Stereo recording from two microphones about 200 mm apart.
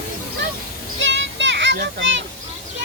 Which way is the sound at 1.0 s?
65° right (ahead or behind).